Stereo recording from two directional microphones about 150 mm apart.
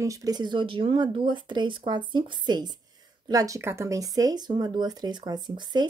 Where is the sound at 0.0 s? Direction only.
20° right (ahead or behind).